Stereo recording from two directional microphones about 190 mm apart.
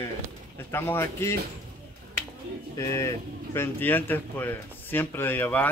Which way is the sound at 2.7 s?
15° left (ahead or behind).